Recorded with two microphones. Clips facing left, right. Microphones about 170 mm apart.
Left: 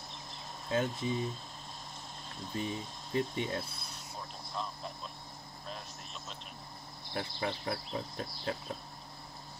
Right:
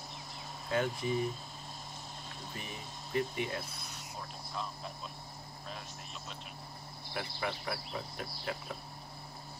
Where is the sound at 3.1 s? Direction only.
30° left (ahead or behind).